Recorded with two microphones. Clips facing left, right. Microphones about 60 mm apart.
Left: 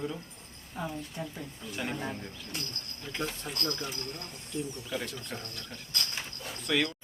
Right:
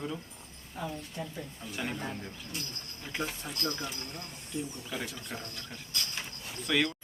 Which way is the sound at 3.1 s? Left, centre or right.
Centre.